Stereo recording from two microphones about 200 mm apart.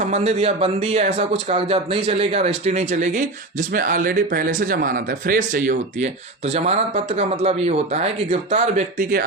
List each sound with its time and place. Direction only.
0.0 s speech: 35° right (ahead or behind)